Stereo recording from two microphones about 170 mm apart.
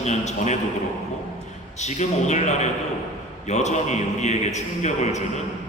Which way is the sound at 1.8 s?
45° left (ahead or behind).